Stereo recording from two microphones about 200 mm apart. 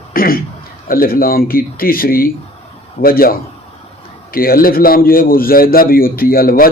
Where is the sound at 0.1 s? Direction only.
45° left (ahead or behind).